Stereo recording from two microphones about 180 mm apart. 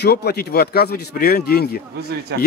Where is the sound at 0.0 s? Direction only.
65° left (ahead or behind).